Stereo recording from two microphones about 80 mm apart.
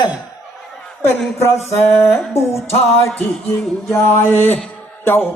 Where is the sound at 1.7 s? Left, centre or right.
Left.